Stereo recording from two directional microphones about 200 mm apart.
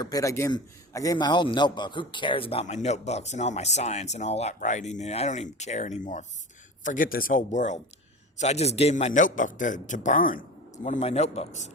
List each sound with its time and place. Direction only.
0.0 s a man's voice: 15° left (ahead or behind); by 11.7 s 35° left (ahead or behind)